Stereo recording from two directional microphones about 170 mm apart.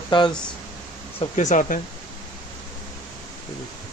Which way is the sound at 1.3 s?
45° left (ahead or behind).